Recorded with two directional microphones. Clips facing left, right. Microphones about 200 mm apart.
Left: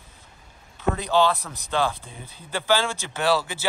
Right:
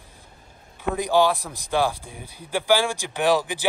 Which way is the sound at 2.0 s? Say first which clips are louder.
Right 3 dB; 15° right (ahead or behind).